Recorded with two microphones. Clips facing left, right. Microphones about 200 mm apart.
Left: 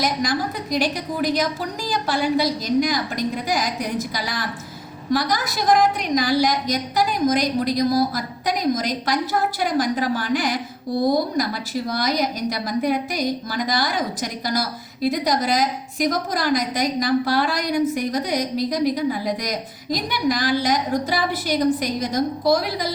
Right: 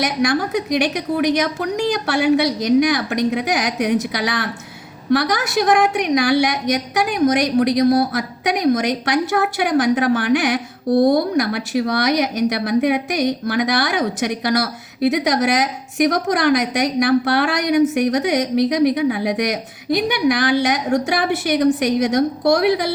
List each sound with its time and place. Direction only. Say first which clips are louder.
0.0 s a woman's voice: right 4 dB; 75° right (ahead or behind)